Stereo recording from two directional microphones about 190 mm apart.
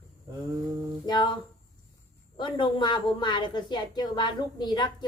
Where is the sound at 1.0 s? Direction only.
20° left (ahead or behind).